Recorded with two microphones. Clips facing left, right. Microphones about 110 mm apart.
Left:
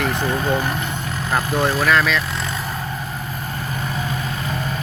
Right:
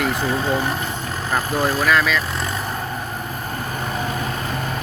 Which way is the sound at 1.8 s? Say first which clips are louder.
Even; 5° right (ahead or behind).